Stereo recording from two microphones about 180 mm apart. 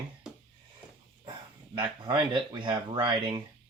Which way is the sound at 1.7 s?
25° right (ahead or behind).